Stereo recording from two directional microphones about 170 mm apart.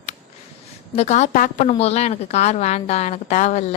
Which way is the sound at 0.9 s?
40° left (ahead or behind).